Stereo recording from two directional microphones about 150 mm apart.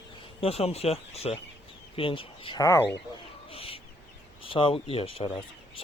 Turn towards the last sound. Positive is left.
turn(degrees=35)  # may be behind; listen again after turning